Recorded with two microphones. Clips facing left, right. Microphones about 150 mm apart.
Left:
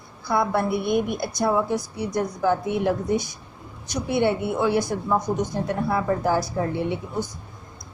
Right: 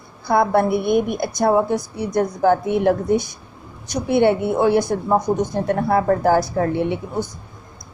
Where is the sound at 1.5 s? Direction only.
45° right (ahead or behind); by 7.0 s 65° right (ahead or behind).